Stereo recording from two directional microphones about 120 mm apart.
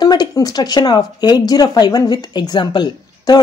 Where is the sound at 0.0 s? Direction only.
35° left (ahead or behind).